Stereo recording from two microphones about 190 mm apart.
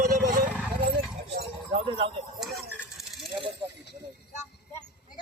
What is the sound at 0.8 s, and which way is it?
Horse, 55° right (ahead or behind).